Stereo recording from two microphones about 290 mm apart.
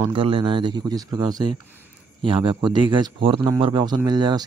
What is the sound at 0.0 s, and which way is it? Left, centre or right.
Speech, centre.